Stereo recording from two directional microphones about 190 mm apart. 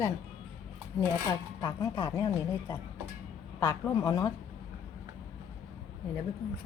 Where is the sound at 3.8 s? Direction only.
15° left (ahead or behind).